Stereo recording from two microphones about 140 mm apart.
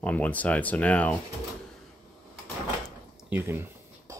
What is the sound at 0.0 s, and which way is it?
Speech, 10° left (ahead or behind).